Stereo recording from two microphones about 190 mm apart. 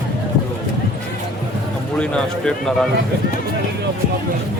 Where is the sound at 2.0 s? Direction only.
5° left (ahead or behind).